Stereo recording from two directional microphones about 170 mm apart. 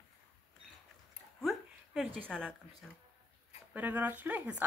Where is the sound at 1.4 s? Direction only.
Centre (ahead or behind).